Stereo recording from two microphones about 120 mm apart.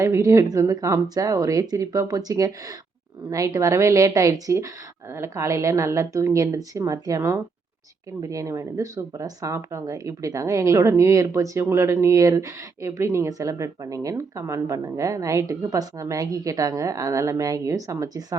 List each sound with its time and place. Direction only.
0.0 s speech: 25° right (ahead or behind)